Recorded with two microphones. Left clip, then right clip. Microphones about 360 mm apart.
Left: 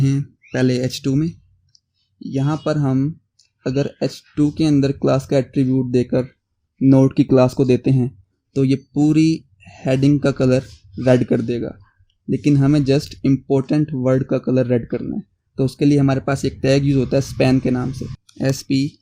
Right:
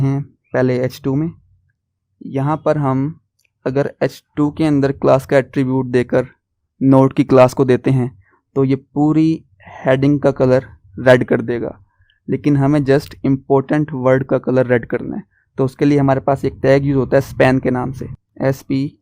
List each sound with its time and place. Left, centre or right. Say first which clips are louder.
0.0 s speech: right 1 dB; right
2.3 s speech: right 5 dB; right